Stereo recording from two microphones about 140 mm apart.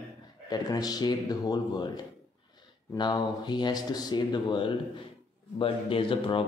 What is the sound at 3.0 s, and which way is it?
Speech, 30° left (ahead or behind).